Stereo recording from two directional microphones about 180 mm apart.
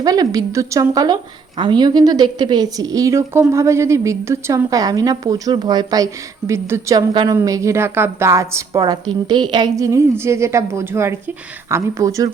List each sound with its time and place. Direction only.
0.0 s a woman's voice: 20° right (ahead or behind)